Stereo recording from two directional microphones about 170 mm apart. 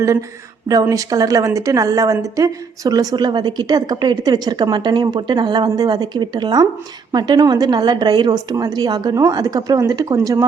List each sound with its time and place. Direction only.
0.0 s a woman's voice: 15° right (ahead or behind)